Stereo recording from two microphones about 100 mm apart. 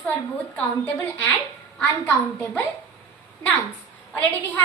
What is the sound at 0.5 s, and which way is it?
A woman's voice, 15° left (ahead or behind).